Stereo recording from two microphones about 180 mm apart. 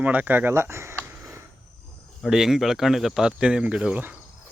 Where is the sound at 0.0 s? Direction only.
10° right (ahead or behind).